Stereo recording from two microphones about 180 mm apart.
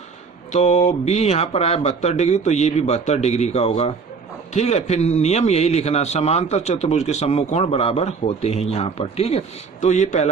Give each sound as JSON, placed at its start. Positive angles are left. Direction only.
{"t": 0.5, "sound": "a man's voice", "side_deg": 40}